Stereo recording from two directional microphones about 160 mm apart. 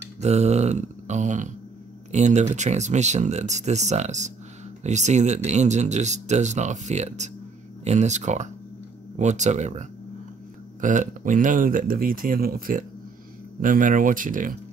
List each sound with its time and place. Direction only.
0.2 s speech: 45° right (ahead or behind)